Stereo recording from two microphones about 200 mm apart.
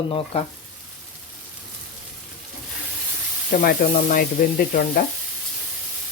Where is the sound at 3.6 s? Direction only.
50° left (ahead or behind).